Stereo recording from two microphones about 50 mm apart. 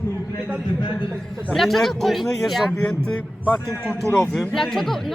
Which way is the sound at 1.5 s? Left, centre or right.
Centre.